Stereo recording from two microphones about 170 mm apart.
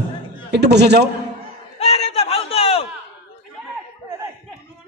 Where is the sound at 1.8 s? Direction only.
35° left (ahead or behind).